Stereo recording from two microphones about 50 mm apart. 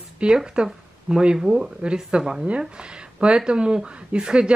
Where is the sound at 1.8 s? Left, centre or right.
Centre.